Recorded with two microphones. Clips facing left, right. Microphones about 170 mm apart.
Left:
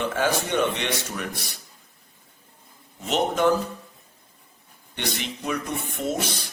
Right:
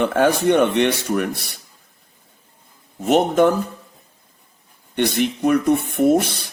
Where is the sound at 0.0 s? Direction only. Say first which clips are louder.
Right 8 dB; 60° right (ahead or behind).